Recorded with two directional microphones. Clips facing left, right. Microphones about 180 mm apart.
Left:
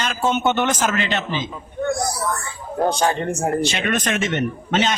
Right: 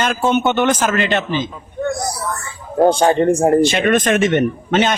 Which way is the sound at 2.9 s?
30° right (ahead or behind).